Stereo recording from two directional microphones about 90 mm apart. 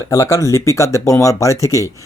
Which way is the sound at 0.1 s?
35° left (ahead or behind).